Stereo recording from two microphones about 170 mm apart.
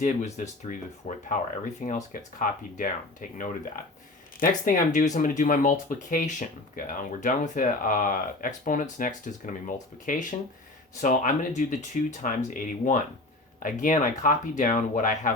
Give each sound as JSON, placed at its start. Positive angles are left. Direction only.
{"t": 0.0, "sound": "speech", "side_deg": 45}
{"t": 2.4, "sound": "speech", "side_deg": 50}